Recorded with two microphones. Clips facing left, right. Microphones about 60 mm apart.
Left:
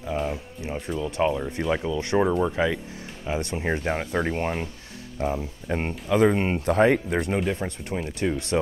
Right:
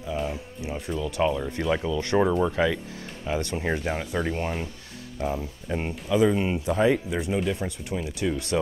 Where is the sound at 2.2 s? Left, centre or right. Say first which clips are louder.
Even; centre.